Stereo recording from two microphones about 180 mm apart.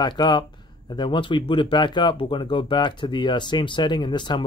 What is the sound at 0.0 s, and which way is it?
Speech, 25° left (ahead or behind).